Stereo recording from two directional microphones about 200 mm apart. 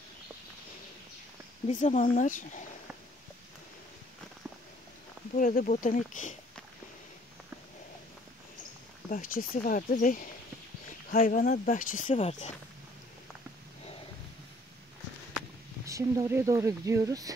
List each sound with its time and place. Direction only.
1.7 s speech: 40° left (ahead or behind)
5.4 s speech: 40° left (ahead or behind)
9.1 s speech: 45° left (ahead or behind)
15.8 s speech: 15° right (ahead or behind)